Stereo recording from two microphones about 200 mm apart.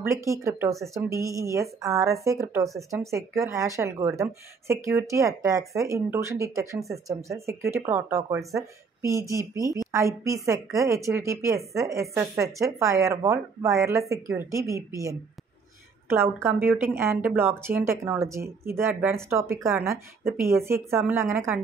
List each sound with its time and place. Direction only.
0.0 s speech: 15° right (ahead or behind)
16.1 s speech: 10° right (ahead or behind)